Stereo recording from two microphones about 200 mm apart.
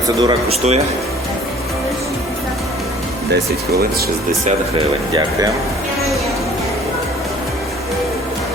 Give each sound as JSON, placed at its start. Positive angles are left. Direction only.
{"t": 0.2, "sound": "speech", "side_deg": -25}